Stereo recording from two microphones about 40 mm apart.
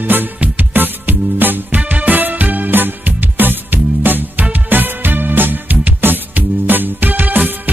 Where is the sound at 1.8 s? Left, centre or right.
Right.